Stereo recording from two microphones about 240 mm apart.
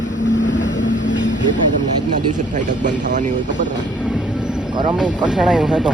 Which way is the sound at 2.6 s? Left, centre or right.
Right.